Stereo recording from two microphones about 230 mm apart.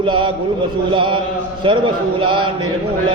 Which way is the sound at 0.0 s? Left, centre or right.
Right.